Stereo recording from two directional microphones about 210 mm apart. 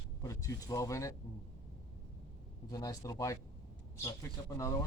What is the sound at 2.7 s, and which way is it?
A man's voice, 15° left (ahead or behind).